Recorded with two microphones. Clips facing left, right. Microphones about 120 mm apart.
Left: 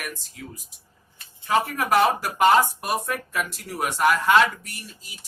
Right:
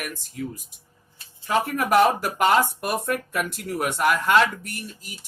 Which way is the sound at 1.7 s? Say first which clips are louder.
Right 5 dB; 50° right (ahead or behind).